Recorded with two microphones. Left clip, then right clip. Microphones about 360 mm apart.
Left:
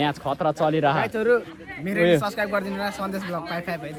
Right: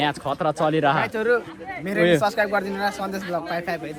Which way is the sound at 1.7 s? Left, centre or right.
Centre.